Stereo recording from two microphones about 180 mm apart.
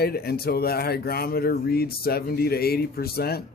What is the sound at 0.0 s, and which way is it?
Speech, 60° left (ahead or behind).